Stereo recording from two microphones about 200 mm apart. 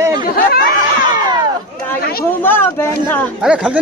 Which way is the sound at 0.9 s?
20° right (ahead or behind).